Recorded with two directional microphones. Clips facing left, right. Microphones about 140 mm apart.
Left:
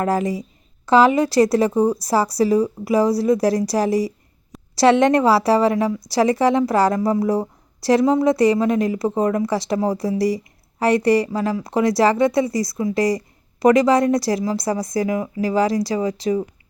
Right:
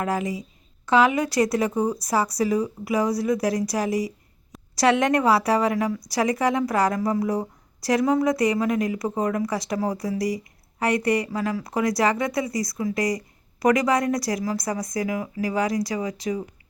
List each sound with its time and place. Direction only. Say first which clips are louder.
0.0 s a woman's voice: left 5 dB; 35° left (ahead or behind)